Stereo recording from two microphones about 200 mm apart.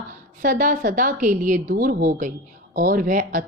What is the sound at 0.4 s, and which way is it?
Speech, 40° right (ahead or behind).